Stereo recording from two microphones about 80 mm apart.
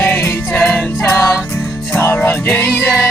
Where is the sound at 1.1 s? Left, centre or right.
Left.